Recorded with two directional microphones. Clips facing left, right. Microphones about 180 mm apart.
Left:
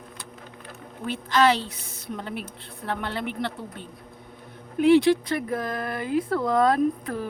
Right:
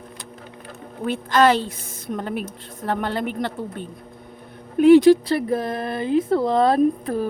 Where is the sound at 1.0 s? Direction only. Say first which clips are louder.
Right 4 dB; 50° right (ahead or behind).